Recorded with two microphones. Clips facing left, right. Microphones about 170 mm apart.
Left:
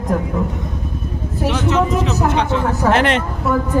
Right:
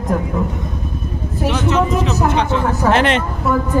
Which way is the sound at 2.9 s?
25° right (ahead or behind).